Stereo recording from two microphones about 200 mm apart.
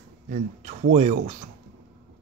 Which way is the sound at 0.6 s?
35° right (ahead or behind).